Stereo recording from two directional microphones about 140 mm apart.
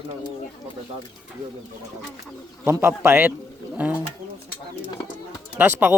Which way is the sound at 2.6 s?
20° right (ahead or behind).